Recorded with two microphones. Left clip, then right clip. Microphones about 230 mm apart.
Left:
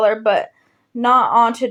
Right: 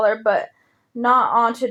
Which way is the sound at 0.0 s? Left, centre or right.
Left.